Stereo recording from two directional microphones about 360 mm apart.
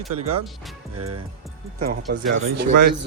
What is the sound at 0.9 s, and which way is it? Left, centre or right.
Music, right.